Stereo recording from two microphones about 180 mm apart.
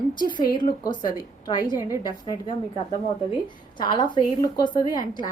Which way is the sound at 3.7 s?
25° left (ahead or behind).